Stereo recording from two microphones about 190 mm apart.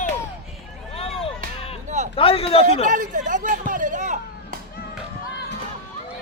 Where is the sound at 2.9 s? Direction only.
40° right (ahead or behind).